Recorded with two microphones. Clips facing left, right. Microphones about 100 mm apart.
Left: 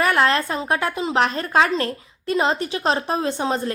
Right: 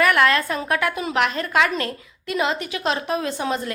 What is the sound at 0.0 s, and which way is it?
A woman's voice, 30° left (ahead or behind).